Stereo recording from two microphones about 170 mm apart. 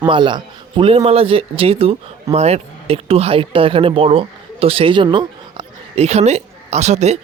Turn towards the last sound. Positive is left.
turn(degrees=-40)  # may be behind; listen again after turning